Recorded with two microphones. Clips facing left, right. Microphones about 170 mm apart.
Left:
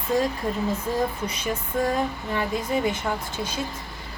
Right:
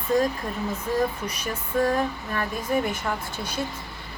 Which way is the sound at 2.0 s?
15° left (ahead or behind).